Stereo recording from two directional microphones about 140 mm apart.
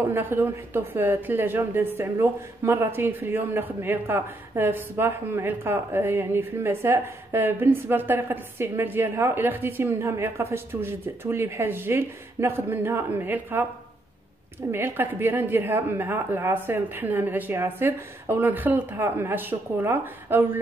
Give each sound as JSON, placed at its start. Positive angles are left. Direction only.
{"t": 0.0, "sound": "a woman's voice", "side_deg": -15}
{"t": 14.7, "sound": "a woman's voice", "side_deg": -15}